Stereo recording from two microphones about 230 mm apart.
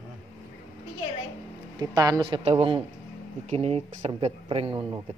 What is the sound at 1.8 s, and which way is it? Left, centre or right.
A woman's voice, centre.